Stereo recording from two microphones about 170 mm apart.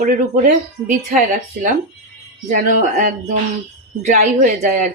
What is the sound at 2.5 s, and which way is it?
Speech, 50° right (ahead or behind).